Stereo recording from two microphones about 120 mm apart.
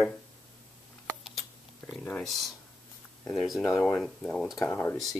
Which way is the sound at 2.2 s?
Centre (ahead or behind).